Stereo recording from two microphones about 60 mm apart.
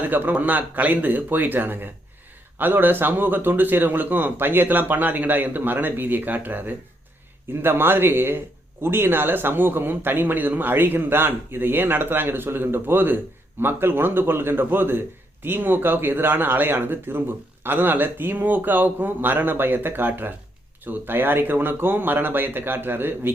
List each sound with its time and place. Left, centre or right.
0.0 s a man's voice: right